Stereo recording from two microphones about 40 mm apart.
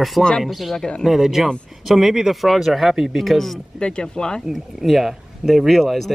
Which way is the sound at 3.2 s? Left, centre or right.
Centre.